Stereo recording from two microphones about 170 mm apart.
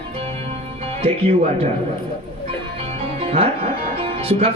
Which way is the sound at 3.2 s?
35° right (ahead or behind).